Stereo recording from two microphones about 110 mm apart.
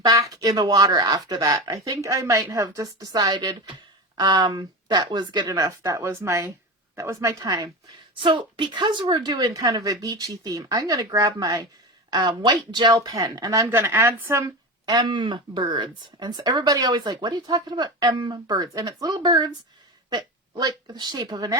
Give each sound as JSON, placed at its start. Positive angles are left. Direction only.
{"t": 0.0, "sound": "a woman's voice", "side_deg": -35}
{"t": 8.2, "sound": "a woman's voice", "side_deg": -50}
{"t": 9.2, "sound": "speech", "side_deg": -35}
{"t": 13.7, "sound": "a woman's voice", "side_deg": -20}
{"t": 14.8, "sound": "speech", "side_deg": -40}
{"t": 20.6, "sound": "speech", "side_deg": -35}